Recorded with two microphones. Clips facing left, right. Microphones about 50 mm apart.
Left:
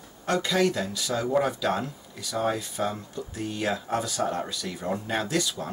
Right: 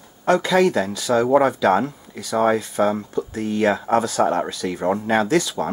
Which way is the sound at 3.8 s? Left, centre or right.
Right.